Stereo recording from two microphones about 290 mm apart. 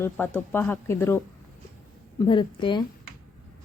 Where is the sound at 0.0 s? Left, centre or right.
Centre.